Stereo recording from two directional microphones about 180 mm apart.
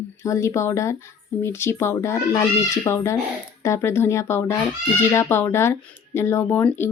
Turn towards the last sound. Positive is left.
turn(degrees=10)  # may be behind; listen again after turning